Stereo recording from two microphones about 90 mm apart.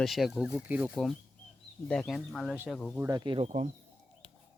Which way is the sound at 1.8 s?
10° left (ahead or behind).